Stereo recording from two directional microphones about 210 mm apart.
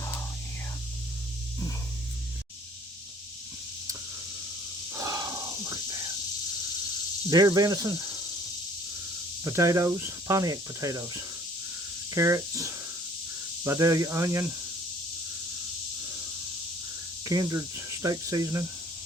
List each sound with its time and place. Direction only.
4.9 s a sound: 15° right (ahead or behind)
7.3 s speech: 15° right (ahead or behind)
9.4 s speech: 15° right (ahead or behind)
17.2 s speech: 15° right (ahead or behind)